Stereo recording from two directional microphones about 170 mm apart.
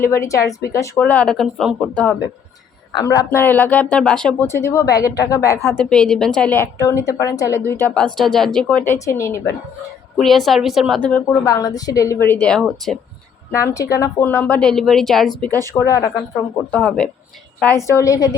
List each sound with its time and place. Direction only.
0.0 s speech: 15° left (ahead or behind)
2.9 s speech: 20° left (ahead or behind)
10.2 s a woman's voice: centre (ahead or behind)
11.4 s speech: 20° left (ahead or behind); by 13.0 s centre (ahead or behind)
13.5 s a woman's voice: 20° left (ahead or behind)
15.8 s speech: 20° left (ahead or behind)
16.7 s speech: 5° left (ahead or behind)